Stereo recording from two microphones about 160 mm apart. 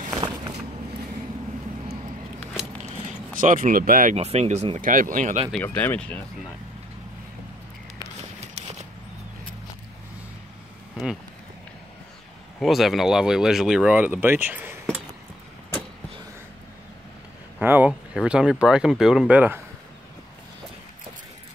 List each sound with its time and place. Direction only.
3.3 s speech: 55° right (ahead or behind)
4.2 s speech: 40° right (ahead or behind)
5.5 s speech: 10° left (ahead or behind)
12.5 s speech: centre (ahead or behind)
17.6 s speech: 10° right (ahead or behind)